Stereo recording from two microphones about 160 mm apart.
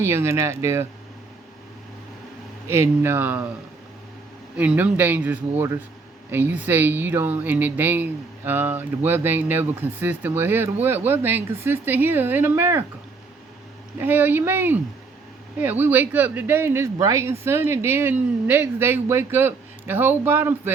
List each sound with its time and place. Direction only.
0.0 s speech: 15° right (ahead or behind)
2.6 s speech: 15° right (ahead or behind)
4.5 s speech: 10° right (ahead or behind)
14.0 s speech: 10° right (ahead or behind)